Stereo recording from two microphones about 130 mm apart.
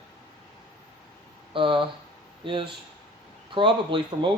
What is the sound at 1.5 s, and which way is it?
Speech, 40° right (ahead or behind).